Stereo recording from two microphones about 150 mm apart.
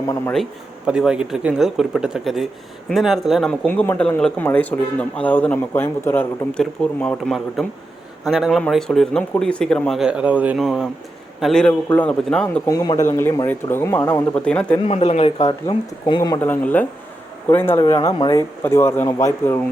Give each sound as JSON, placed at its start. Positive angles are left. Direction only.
{"t": 0.9, "sound": "speech", "side_deg": -5}
{"t": 11.7, "sound": "speech", "side_deg": 15}
{"t": 12.6, "sound": "speech", "side_deg": 25}
{"t": 14.8, "sound": "speech", "side_deg": 45}
{"t": 15.4, "sound": "speech", "side_deg": 30}
{"t": 16.4, "sound": "speech", "side_deg": 10}